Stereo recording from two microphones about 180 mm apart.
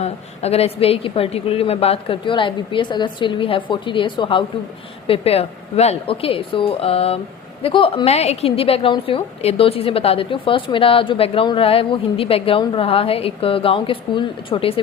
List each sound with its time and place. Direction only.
0.0 s a woman's voice: 35° left (ahead or behind)